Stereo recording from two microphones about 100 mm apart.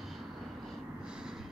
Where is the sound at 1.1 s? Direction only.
5° right (ahead or behind).